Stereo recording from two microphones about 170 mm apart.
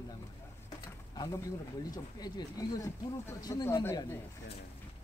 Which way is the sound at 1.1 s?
20° left (ahead or behind).